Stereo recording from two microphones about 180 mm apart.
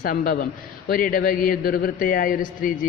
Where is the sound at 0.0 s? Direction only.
50° left (ahead or behind).